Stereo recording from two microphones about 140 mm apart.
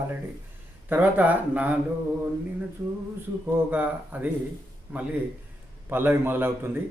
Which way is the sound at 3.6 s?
10° right (ahead or behind).